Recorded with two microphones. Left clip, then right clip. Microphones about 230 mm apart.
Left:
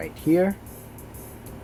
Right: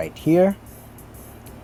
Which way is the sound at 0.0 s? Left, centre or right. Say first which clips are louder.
Right 4 dB; right.